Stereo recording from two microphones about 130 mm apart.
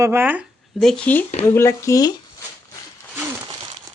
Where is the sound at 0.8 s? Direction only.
10° left (ahead or behind).